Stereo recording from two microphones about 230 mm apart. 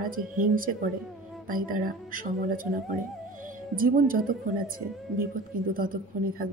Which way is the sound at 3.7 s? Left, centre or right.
Right.